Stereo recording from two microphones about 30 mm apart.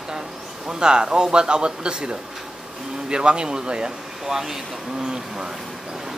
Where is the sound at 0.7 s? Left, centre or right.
Right.